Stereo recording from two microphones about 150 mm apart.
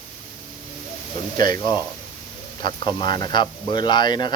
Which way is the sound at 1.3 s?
30° left (ahead or behind).